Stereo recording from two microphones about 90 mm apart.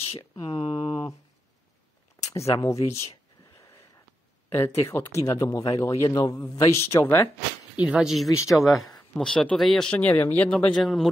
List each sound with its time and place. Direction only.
0.4 s speech: 50° left (ahead or behind)
2.3 s speech: 35° left (ahead or behind)
4.5 s speech: 30° left (ahead or behind)
7.7 s speech: 15° right (ahead or behind)
8.0 s speech: 5° right (ahead or behind)
8.3 s speech: 35° left (ahead or behind)
9.2 s speech: 5° left (ahead or behind)
9.8 s speech: 15° left (ahead or behind)
10.5 s speech: 10° left (ahead or behind)